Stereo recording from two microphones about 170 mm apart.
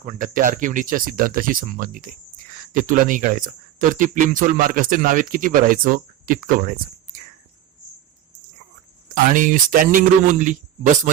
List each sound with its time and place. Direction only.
0.0 s speech: 50° right (ahead or behind)
9.1 s speech: 50° right (ahead or behind)